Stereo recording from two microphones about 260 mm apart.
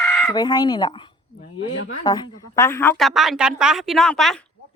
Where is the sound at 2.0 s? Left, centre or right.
Centre.